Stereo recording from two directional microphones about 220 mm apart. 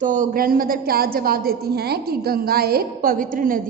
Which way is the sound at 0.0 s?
35° right (ahead or behind).